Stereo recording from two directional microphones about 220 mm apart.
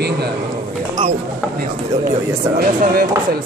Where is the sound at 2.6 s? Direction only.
40° right (ahead or behind).